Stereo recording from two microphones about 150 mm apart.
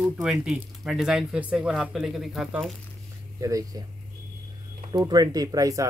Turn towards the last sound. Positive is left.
turn(degrees=-25)  # may be behind; listen again after turning